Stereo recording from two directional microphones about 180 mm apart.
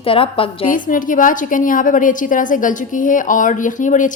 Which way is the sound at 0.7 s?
50° left (ahead or behind).